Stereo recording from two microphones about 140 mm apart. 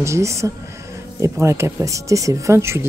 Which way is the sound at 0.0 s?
20° right (ahead or behind).